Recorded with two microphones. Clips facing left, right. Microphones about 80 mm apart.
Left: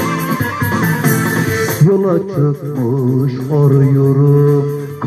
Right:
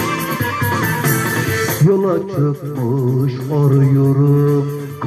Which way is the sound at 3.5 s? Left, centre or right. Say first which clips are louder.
Left 3 dB; left.